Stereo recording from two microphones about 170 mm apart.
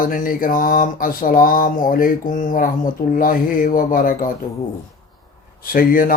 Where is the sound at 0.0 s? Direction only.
55° left (ahead or behind).